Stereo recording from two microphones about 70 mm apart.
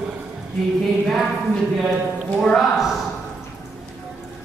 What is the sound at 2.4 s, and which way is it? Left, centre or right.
Speech, centre.